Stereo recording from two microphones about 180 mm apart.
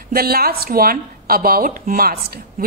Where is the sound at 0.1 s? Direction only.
55° right (ahead or behind).